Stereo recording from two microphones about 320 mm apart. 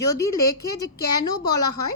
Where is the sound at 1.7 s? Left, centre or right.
Left.